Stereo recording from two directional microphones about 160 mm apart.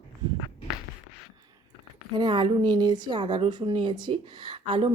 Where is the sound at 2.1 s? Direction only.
30° right (ahead or behind).